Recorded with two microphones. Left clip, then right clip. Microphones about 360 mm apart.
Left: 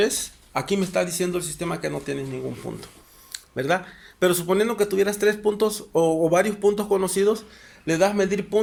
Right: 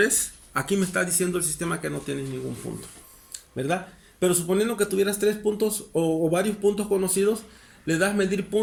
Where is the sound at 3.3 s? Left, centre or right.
Left.